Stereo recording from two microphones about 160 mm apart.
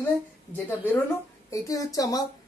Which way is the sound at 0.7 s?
10° left (ahead or behind).